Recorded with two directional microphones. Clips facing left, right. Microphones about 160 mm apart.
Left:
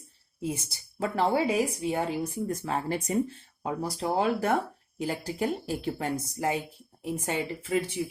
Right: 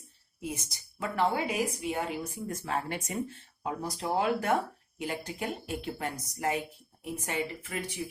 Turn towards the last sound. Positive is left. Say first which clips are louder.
# left 9 dB
turn(degrees=25)  # may be behind; listen again after turning